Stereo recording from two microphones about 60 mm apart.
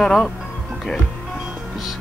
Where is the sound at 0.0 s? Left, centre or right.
Centre.